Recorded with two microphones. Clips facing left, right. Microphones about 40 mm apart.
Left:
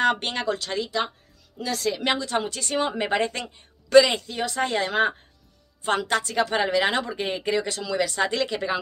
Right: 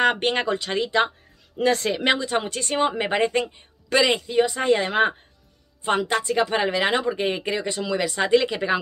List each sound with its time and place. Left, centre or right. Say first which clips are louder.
0.0 s speech: right 2 dB; centre; by 2.0 s right
2.0 s speech: right 3 dB; right
3.0 s speech: right 3 dB; centre